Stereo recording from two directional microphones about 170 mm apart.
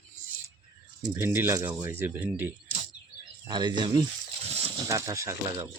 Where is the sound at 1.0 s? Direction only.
15° right (ahead or behind).